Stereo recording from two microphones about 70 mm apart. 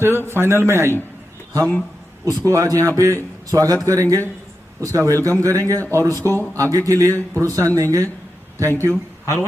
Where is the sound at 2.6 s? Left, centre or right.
Right.